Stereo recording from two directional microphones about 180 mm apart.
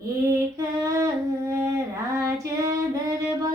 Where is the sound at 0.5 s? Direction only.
15° right (ahead or behind).